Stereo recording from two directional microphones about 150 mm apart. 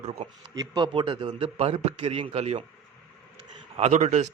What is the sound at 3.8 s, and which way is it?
Speech, 50° right (ahead or behind).